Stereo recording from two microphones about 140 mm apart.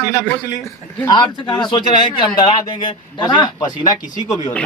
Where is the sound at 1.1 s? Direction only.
35° left (ahead or behind).